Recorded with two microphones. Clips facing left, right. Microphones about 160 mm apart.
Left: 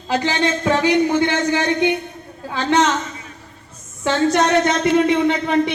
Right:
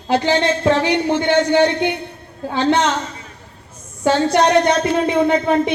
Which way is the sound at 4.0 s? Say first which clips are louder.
Right 2 dB; 35° right (ahead or behind).